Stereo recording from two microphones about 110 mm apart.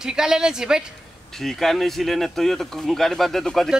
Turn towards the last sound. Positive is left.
turn(degrees=5)  # may be behind; listen again after turning